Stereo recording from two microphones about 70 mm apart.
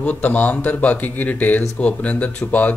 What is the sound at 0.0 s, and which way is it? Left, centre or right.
Speech, left.